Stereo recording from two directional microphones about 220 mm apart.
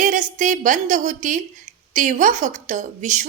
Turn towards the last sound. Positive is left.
turn(degrees=-35)  # may be behind; listen again after turning